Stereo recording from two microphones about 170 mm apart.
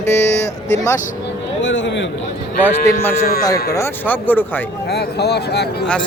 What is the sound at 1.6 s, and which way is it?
Speech, 90° left.